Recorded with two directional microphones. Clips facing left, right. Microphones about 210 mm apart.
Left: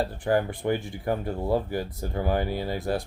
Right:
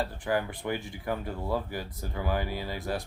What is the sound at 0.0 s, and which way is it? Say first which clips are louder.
Speech: left 5 dB; 35° left (ahead or behind).